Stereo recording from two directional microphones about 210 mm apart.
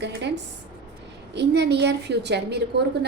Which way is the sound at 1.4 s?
55° right (ahead or behind).